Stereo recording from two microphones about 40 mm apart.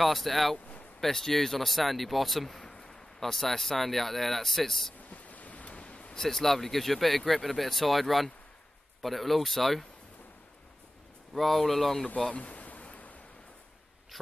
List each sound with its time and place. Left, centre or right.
0.0 s speech: centre
2.7 s a sound: centre
3.2 s speech: centre
5.1 s a sound: left
6.1 s speech: centre
11.3 s speech: centre
12.3 s a sound: left
12.8 s waves: left
14.1 s speech: centre